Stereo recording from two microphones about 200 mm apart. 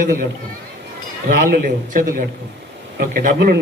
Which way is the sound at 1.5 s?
45° right (ahead or behind).